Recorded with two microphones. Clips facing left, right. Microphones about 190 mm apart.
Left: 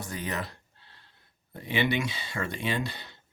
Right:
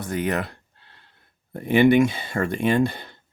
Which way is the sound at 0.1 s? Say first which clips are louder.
Right 11 dB; 60° right (ahead or behind).